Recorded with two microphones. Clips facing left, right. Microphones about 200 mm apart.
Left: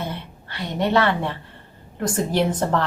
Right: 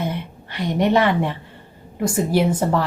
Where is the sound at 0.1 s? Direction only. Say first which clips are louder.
Right 4 dB; 15° right (ahead or behind).